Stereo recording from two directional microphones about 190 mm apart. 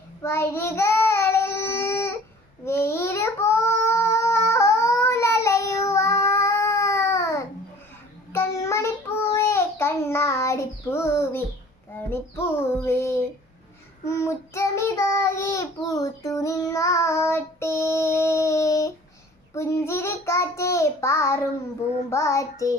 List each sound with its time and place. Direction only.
0.2 s child singing: 15° left (ahead or behind)